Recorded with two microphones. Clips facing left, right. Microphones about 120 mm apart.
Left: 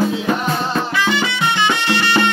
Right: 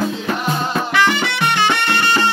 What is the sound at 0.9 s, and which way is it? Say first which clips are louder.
Music: right 2 dB; 70° right (ahead or behind).